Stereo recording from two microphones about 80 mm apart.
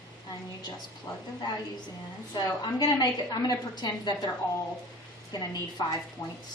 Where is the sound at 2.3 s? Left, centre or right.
Left.